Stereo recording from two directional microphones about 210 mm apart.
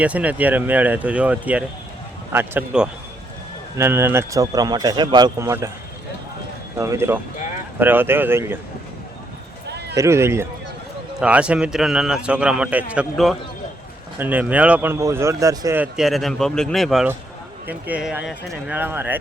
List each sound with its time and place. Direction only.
0.0 s speech: 5° right (ahead or behind)
6.7 s speech: 15° right (ahead or behind)
9.9 s a man's voice: 15° right (ahead or behind)